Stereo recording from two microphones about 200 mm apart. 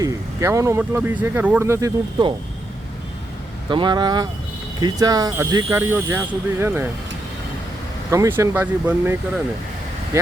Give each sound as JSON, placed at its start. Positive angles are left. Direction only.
{"t": 0.0, "sound": "speech", "side_deg": -15}
{"t": 3.7, "sound": "speech", "side_deg": -20}
{"t": 8.1, "sound": "speech", "side_deg": -15}